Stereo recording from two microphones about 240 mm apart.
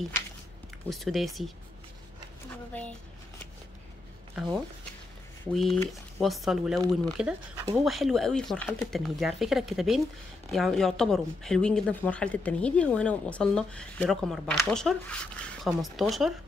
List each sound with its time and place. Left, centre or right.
0.8 s a woman's voice: centre
2.7 s speech: centre
5.4 s a woman's voice: centre